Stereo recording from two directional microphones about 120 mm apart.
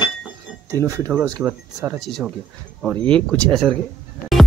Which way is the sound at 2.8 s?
10° left (ahead or behind).